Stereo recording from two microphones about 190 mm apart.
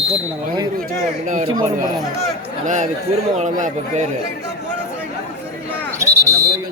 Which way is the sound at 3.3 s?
40° right (ahead or behind).